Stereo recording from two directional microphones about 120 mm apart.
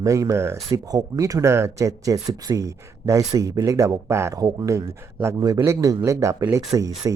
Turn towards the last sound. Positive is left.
turn(degrees=-30)  # may be behind; listen again after turning